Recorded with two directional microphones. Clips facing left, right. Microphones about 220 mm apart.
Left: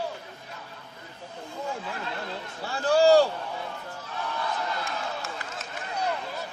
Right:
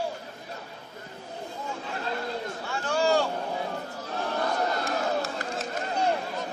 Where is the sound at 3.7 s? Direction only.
40° right (ahead or behind).